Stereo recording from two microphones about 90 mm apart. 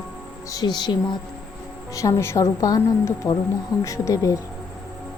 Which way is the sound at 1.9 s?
35° left (ahead or behind).